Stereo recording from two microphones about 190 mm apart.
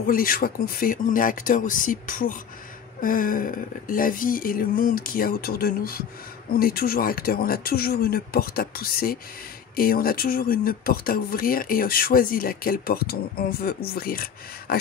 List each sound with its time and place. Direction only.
0.0 s speech: 50° left (ahead or behind)